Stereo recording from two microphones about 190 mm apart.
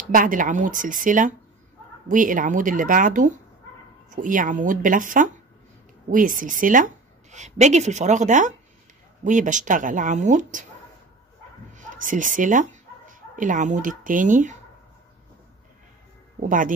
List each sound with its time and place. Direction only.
0.1 s a woman's voice: 45° right (ahead or behind)
11.7 s speech: 45° right (ahead or behind)
16.3 s speech: 45° right (ahead or behind)